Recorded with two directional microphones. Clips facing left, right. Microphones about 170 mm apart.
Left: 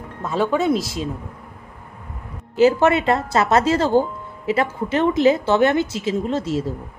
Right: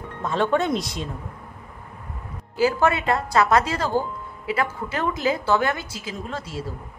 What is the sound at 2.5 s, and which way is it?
A woman's voice, 25° left (ahead or behind).